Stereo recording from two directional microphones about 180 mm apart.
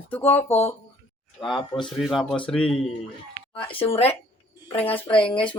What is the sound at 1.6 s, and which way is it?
Speech, 25° left (ahead or behind).